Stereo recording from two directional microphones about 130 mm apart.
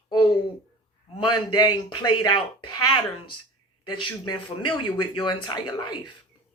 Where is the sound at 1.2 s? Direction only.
35° left (ahead or behind).